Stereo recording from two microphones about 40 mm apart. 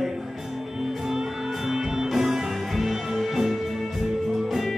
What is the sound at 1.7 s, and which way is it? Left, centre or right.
Music, centre.